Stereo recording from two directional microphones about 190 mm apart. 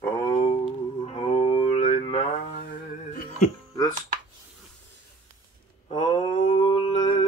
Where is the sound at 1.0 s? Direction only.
30° left (ahead or behind).